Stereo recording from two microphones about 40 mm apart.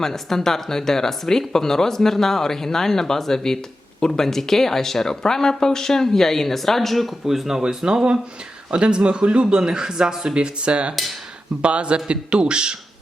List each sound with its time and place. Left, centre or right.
0.0 s speech: centre
8.7 s speech: right